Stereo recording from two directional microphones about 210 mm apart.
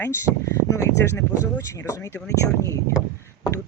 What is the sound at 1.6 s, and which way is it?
Speech, 15° left (ahead or behind).